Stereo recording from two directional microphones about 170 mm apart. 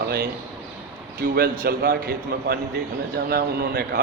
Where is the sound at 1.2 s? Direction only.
60° right (ahead or behind).